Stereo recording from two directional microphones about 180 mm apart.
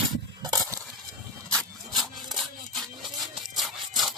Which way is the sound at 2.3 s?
Centre (ahead or behind).